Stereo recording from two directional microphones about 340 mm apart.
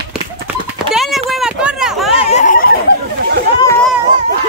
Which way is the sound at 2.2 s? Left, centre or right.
Left.